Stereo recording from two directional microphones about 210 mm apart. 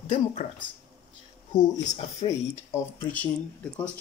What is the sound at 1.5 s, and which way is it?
Speech, 20° left (ahead or behind).